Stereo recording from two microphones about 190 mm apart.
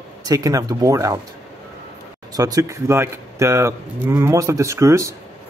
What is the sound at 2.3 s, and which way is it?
Speech, 20° right (ahead or behind).